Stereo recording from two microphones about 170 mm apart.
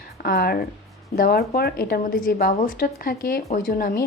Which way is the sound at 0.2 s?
65° left (ahead or behind).